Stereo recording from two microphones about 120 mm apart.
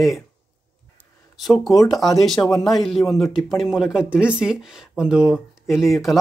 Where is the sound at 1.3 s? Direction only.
Centre (ahead or behind).